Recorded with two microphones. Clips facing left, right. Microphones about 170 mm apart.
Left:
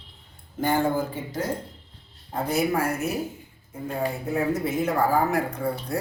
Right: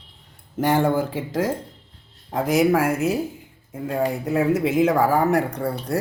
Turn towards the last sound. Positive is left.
turn(degrees=-75)  # may be behind; listen again after turning